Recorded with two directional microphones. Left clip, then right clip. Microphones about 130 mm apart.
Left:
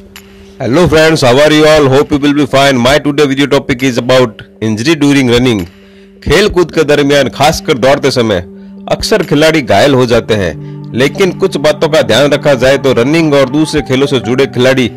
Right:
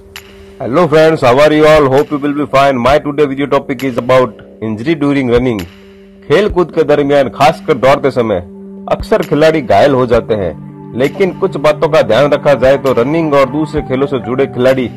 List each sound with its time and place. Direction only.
0.6 s a man's voice: 40° left (ahead or behind)
2.2 s a man's voice: 45° left (ahead or behind)